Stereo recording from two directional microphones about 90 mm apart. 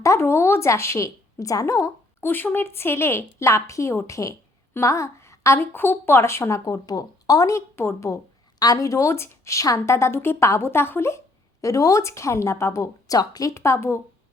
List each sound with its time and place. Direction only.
0.0 s a woman's voice: 30° left (ahead or behind)
2.2 s a woman's voice: 20° left (ahead or behind)
4.7 s a sound: 35° left (ahead or behind)
5.5 s a woman's voice: 20° left (ahead or behind)
8.5 s a woman's voice: 45° left (ahead or behind)
13.5 s a woman's voice: 30° left (ahead or behind)